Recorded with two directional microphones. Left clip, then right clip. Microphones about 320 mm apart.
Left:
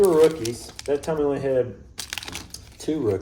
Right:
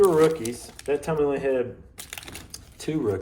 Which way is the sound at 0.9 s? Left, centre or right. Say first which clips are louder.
Left 1 dB; right.